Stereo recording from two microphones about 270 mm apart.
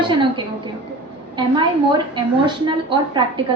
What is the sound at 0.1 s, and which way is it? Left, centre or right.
A woman's voice, centre.